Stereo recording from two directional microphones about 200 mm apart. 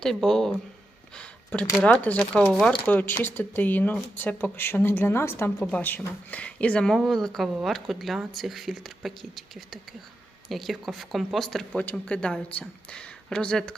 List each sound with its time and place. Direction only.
0.0 s speech: centre (ahead or behind)
1.1 s a sound: 5° left (ahead or behind)
1.7 s a woman's voice: 5° left (ahead or behind)